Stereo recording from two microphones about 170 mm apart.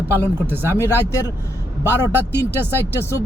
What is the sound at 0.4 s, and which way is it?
Speech, 15° right (ahead or behind).